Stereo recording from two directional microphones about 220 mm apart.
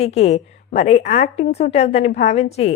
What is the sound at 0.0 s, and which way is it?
A woman's voice, 30° left (ahead or behind).